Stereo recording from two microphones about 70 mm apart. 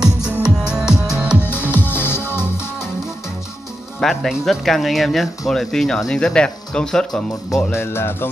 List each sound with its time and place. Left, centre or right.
0.0 s music: centre
1.4 s music: left
4.0 s speech: centre
7.7 s music: left